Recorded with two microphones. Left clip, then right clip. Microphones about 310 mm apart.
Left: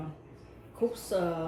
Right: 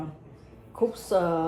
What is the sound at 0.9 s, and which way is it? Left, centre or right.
Speech, right.